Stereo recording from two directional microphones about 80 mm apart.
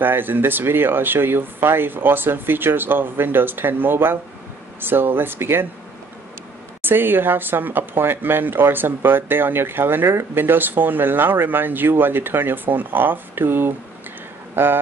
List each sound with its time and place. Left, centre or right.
0.0 s speech: right
6.8 s speech: right